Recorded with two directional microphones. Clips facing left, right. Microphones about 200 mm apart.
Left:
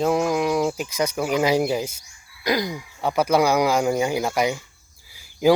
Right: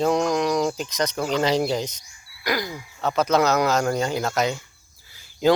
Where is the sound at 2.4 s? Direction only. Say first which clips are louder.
Left 3 dB; 20° left (ahead or behind).